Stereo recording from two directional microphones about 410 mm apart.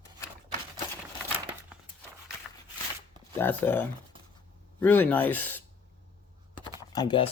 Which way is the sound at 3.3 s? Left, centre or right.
Centre.